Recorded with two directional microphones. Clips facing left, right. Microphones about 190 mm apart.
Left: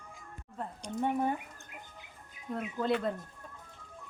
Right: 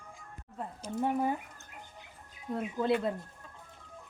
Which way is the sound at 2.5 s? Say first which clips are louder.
Right 2 dB; 15° right (ahead or behind).